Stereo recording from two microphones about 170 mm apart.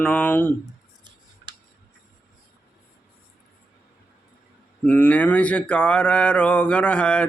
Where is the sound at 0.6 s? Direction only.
25° right (ahead or behind).